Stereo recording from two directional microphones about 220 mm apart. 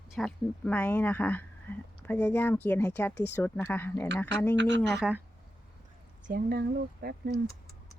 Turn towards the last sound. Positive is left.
turn(degrees=-45)  # may be behind; listen again after turning